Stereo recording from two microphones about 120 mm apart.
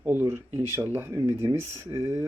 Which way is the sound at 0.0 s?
20° right (ahead or behind).